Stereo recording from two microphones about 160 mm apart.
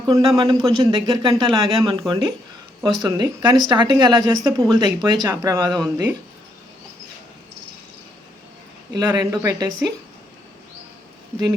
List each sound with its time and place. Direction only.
0.1 s speech: 25° right (ahead or behind)
8.9 s speech: 25° right (ahead or behind)